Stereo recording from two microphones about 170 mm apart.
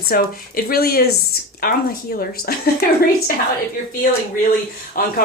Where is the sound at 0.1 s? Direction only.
60° left (ahead or behind).